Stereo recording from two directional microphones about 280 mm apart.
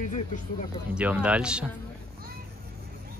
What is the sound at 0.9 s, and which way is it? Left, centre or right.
Speech, centre.